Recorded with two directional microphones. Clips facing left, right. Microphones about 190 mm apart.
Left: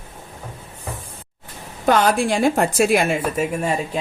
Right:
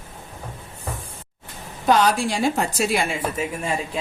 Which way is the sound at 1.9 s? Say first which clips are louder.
Left 2 dB; 55° left (ahead or behind).